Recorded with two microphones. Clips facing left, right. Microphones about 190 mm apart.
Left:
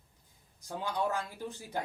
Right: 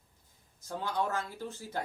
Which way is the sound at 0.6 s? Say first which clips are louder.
Even; 15° left (ahead or behind).